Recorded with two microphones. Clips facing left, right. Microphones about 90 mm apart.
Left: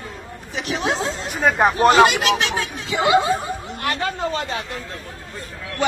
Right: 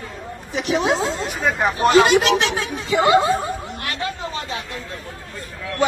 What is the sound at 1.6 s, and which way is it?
Speech, 50° left (ahead or behind).